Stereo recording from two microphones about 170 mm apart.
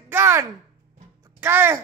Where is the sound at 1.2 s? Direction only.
15° right (ahead or behind).